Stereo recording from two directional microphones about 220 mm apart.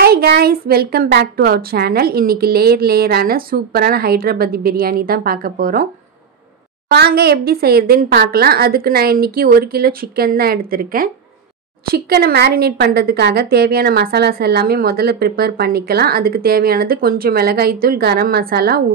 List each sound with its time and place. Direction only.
0.0 s a woman's voice: 45° right (ahead or behind)
6.9 s a woman's voice: 45° right (ahead or behind)